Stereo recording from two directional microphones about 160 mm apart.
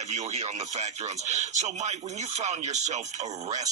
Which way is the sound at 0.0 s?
45° right (ahead or behind).